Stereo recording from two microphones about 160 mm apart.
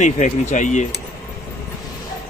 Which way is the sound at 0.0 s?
50° left (ahead or behind).